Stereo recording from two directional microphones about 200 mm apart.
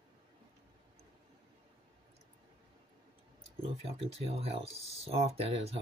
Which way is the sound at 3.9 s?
30° right (ahead or behind).